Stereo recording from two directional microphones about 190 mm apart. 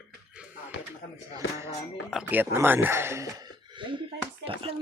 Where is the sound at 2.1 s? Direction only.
5° right (ahead or behind); by 4.0 s 25° right (ahead or behind).